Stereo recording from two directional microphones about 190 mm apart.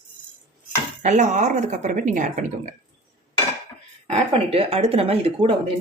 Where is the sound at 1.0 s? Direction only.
40° right (ahead or behind).